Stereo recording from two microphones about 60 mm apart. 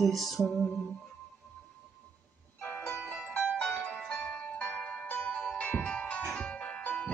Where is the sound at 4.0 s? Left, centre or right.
Centre.